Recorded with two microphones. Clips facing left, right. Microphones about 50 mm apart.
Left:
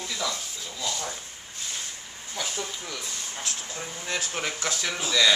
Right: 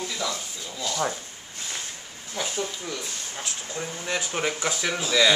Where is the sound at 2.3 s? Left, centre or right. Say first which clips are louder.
Right 3 dB; centre.